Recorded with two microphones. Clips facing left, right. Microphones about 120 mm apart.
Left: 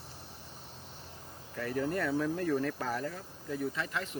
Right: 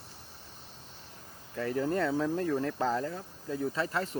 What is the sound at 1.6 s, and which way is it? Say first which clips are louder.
Speech: right 3 dB; 25° right (ahead or behind).